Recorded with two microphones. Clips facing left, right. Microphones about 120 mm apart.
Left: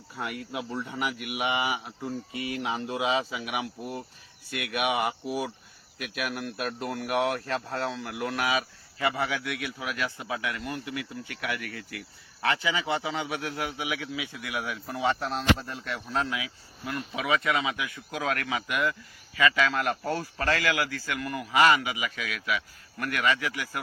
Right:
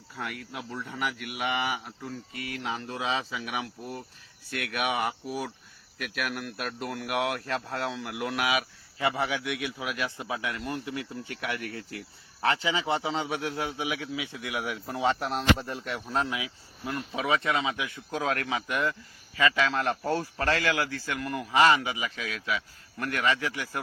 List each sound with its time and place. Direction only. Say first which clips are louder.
0.2 s speech: left 3 dB; 20° left (ahead or behind); by 8.6 s 5° right (ahead or behind)
9.0 s a man's voice: even; 20° right (ahead or behind)